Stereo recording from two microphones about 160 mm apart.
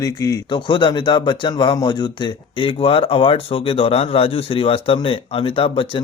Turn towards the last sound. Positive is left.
turn(degrees=35)  # may be behind; listen again after turning